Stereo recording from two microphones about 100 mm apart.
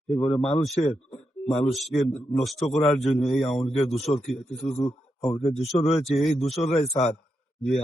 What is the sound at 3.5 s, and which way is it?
Speech, 75° left (ahead or behind).